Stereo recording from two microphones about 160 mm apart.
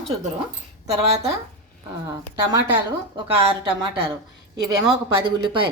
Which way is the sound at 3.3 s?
35° right (ahead or behind).